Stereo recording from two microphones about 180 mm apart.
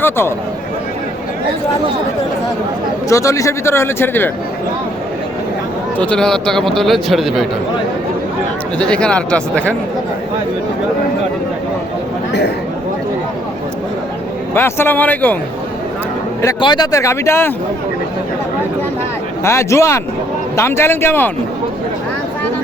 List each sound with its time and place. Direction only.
0.0 s speech: 15° left (ahead or behind)
3.1 s a man's voice: 15° left (ahead or behind)
6.0 s speech: 5° left (ahead or behind)
8.8 s speech: 5° left (ahead or behind)
14.5 s a man's voice: 10° left (ahead or behind)
16.4 s a man's voice: 20° left (ahead or behind)
19.5 s a man's voice: 15° left (ahead or behind)